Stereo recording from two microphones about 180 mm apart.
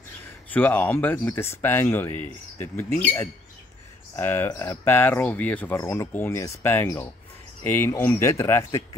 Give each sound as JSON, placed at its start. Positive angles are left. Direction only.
{"t": 0.5, "sound": "speech", "side_deg": 10}
{"t": 2.9, "sound": "speech", "side_deg": 35}
{"t": 4.2, "sound": "speech", "side_deg": 10}